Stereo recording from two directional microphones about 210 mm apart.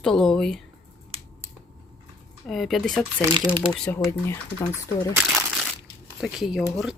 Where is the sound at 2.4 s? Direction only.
Centre (ahead or behind).